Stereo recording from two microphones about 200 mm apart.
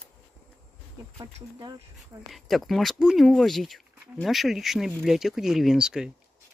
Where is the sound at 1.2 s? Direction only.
20° right (ahead or behind).